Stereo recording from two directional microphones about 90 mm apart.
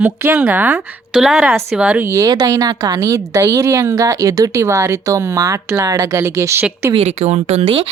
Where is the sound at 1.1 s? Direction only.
5° right (ahead or behind).